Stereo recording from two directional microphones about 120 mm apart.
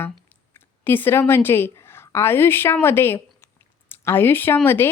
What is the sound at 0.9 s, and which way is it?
A woman's voice, 15° left (ahead or behind).